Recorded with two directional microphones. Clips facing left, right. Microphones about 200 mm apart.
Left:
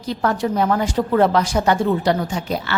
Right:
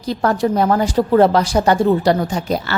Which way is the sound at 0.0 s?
35° right (ahead or behind).